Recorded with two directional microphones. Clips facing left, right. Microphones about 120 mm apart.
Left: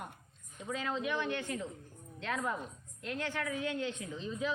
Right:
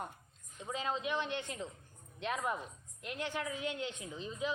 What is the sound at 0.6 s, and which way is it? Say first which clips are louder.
A woman's voice: left 1 dB; 20° right (ahead or behind).